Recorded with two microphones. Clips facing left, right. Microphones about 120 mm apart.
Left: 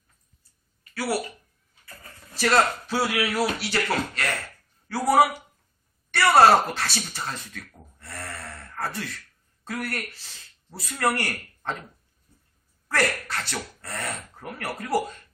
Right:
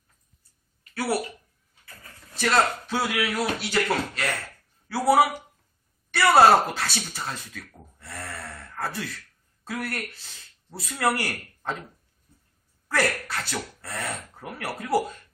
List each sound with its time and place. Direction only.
0.9 s speech: 25° right (ahead or behind)
2.3 s speech: 5° left (ahead or behind)
12.9 s speech: 5° right (ahead or behind)